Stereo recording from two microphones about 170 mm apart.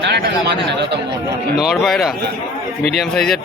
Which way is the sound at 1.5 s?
Centre (ahead or behind).